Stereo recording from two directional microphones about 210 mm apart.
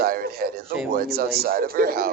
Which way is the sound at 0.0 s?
45° right (ahead or behind).